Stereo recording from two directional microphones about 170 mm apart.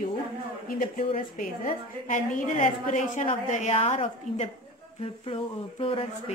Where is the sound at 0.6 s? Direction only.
55° left (ahead or behind); by 6.0 s 35° left (ahead or behind).